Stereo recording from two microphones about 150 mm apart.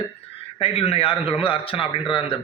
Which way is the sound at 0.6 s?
40° left (ahead or behind).